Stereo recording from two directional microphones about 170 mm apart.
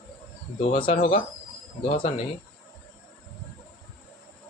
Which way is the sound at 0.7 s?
35° left (ahead or behind).